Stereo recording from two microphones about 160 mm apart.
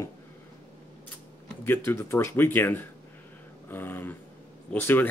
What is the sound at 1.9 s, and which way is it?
Speech, 15° left (ahead or behind).